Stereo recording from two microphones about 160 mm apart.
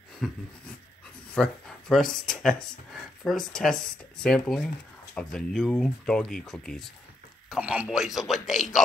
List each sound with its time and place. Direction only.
0.2 s speech: centre (ahead or behind)